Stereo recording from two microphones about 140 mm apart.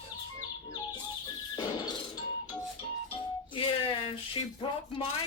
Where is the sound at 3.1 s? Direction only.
40° left (ahead or behind).